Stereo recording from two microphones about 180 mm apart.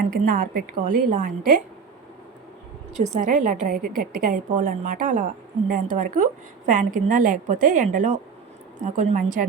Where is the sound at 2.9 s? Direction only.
40° right (ahead or behind).